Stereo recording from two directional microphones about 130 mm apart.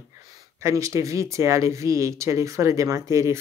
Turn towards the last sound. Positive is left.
turn(degrees=-25)  # may be behind; listen again after turning